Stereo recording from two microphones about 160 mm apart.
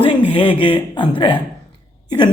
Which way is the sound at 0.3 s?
35° left (ahead or behind).